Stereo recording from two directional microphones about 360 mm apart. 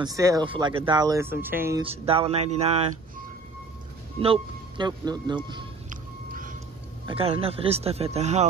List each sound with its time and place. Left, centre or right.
0.0 s speech: centre
4.2 s a sound: centre
7.1 s speech: centre